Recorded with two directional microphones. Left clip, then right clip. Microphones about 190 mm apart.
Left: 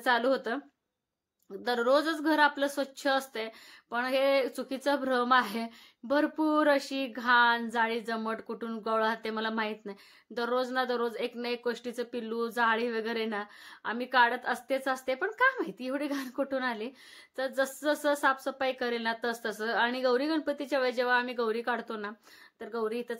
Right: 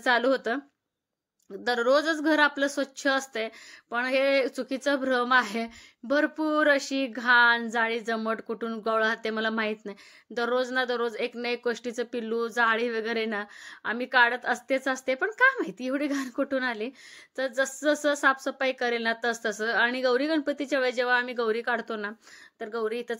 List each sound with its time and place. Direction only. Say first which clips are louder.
0.0 s speech: right 3 dB; 20° right (ahead or behind)
1.6 s speech: right 3 dB; 15° right (ahead or behind)